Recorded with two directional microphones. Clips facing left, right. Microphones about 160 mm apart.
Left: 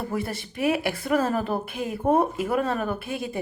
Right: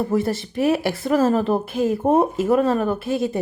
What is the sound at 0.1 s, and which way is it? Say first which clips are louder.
Speech: right 8 dB; 30° right (ahead or behind).